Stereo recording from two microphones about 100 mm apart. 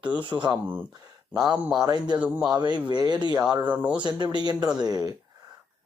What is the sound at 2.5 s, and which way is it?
Speech, 50° right (ahead or behind).